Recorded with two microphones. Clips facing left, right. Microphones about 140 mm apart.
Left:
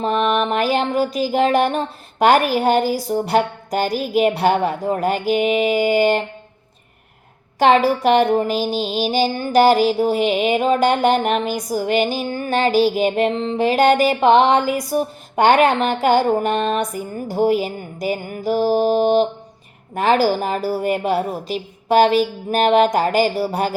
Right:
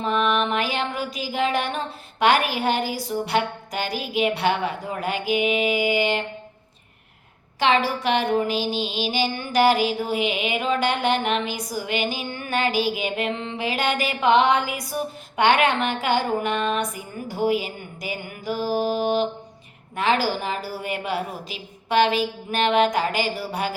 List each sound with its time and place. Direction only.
0.0 s music: 40° left (ahead or behind)
7.6 s a sound: 45° left (ahead or behind)
20.0 s music: 45° left (ahead or behind)